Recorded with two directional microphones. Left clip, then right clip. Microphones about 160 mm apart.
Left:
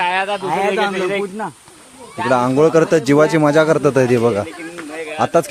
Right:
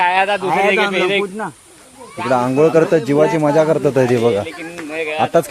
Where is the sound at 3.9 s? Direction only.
5° left (ahead or behind).